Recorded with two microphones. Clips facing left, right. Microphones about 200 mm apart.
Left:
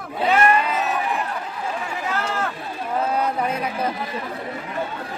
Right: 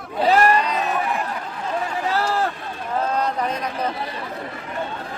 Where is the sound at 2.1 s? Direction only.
35° right (ahead or behind).